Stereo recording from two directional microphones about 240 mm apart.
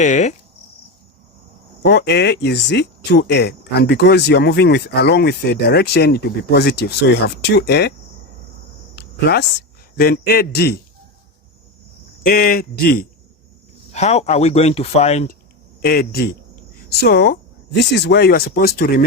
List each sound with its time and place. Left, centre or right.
0.0 s speech: left
1.9 s speech: left
9.0 s a sound: left
9.9 s speech: left
12.2 s speech: left
15.8 s speech: left